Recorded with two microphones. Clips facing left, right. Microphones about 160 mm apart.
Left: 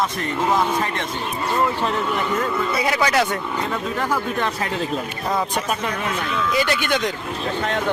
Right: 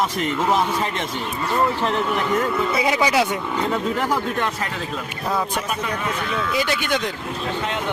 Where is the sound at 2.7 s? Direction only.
15° right (ahead or behind).